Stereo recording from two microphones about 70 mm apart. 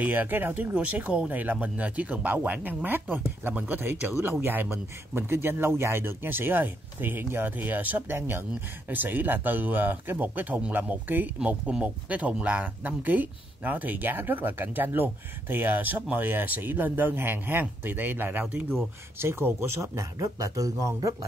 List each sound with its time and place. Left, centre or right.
0.0 s speech: right
11.3 s speech: centre
19.1 s speech: right